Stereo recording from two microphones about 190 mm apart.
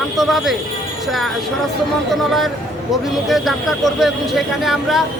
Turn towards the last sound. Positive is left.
turn(degrees=0)  # may be behind; listen again after turning